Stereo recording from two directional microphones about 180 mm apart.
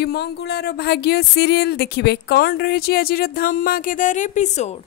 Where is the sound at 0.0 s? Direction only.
65° left (ahead or behind).